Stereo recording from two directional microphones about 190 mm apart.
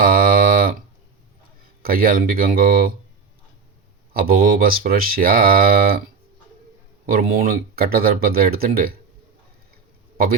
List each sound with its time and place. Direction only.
0.0 s a sound: 50° right (ahead or behind)
1.8 s speech: 50° right (ahead or behind)
4.1 s speech: 50° right (ahead or behind)
7.1 s speech: 50° right (ahead or behind)